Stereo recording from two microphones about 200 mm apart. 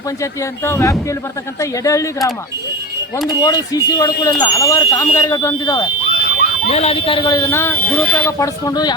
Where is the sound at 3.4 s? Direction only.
20° left (ahead or behind).